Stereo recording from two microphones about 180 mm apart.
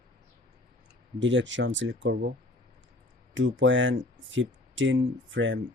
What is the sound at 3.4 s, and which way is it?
Speech, 90° right.